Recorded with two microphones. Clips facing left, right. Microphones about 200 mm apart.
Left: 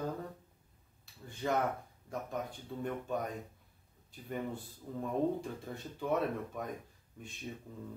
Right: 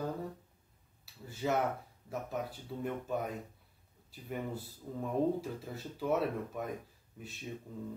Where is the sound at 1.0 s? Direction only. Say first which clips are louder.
Right 2 dB; 5° right (ahead or behind).